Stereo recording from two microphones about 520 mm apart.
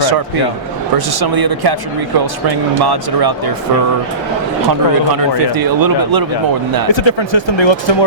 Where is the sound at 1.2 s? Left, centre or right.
Right.